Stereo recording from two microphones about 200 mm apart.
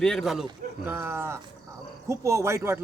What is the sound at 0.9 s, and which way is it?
Speech, 10° right (ahead or behind).